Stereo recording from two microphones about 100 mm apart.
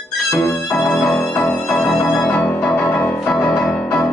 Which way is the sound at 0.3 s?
35° left (ahead or behind).